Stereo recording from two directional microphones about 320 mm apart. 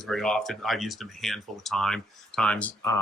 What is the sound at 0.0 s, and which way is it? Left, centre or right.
Speech, centre.